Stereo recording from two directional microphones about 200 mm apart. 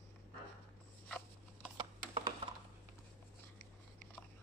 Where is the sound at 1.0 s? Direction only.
5° left (ahead or behind).